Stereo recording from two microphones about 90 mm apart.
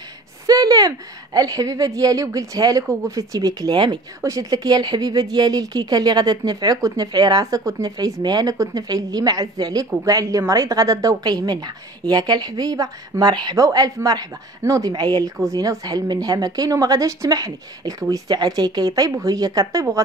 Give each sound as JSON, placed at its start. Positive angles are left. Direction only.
{"t": 0.5, "sound": "a woman's voice", "side_deg": -45}
{"t": 4.2, "sound": "a woman's voice", "side_deg": -40}